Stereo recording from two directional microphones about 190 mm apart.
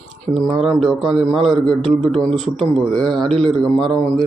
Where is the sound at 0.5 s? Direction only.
Centre (ahead or behind).